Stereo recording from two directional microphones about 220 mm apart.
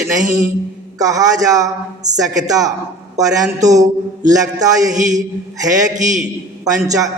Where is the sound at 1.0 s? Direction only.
15° right (ahead or behind).